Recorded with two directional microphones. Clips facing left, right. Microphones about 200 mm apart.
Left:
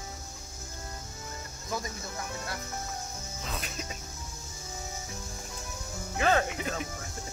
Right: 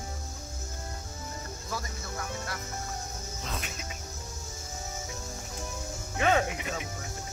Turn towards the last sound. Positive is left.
turn(degrees=0)  # may be behind; listen again after turning